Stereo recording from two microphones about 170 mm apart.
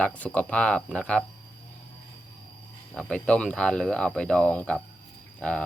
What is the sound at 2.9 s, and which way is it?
Speech, 5° left (ahead or behind).